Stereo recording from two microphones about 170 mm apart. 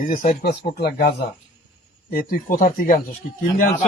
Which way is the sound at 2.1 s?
55° left (ahead or behind).